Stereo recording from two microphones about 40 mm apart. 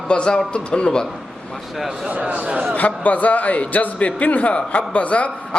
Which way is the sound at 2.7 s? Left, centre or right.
Left.